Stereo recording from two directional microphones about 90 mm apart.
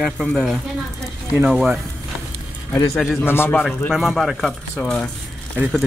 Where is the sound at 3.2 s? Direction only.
25° left (ahead or behind).